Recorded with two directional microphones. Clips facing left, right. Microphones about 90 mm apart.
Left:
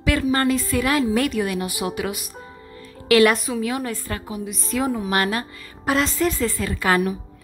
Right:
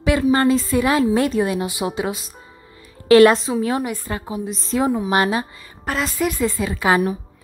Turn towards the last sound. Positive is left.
turn(degrees=-20)  # may be behind; listen again after turning